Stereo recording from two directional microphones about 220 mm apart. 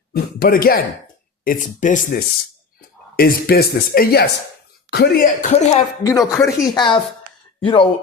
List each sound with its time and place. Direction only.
0.1 s speech: 45° left (ahead or behind)
6.0 s speech: 15° left (ahead or behind)